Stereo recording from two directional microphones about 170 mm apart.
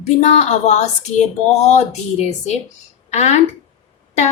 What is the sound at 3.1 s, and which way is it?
Speech, 40° left (ahead or behind).